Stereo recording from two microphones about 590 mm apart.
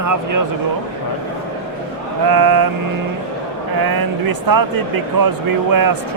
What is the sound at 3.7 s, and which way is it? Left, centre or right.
Speech, right.